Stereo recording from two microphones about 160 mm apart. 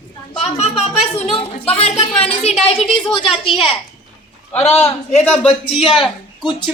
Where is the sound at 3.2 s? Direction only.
30° left (ahead or behind).